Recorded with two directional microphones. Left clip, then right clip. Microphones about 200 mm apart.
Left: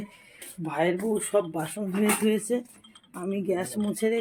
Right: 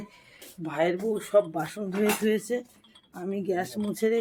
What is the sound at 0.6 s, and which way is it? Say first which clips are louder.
Speech: even; 10° left (ahead or behind).